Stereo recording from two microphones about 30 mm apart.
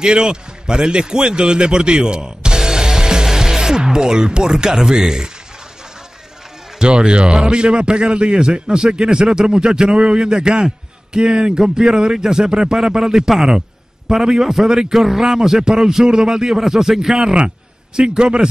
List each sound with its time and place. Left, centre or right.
0.0 s a man's voice: right
6.8 s a man's voice: right; by 17.3 s centre
17.9 s a man's voice: right